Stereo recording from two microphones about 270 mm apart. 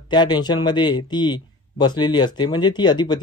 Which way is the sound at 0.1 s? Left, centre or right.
Centre.